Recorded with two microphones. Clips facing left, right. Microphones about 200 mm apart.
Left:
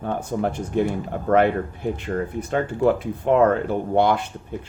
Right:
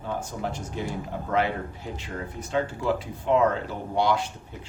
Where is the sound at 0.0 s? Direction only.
55° left (ahead or behind).